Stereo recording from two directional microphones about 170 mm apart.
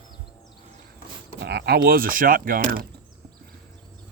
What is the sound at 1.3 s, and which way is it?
Speech, 70° right (ahead or behind).